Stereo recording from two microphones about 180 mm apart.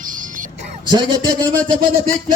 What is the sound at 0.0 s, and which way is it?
Music, 45° right (ahead or behind).